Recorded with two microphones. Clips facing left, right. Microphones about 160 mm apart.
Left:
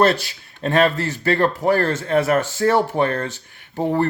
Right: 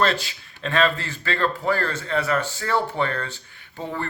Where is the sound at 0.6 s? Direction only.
45° left (ahead or behind).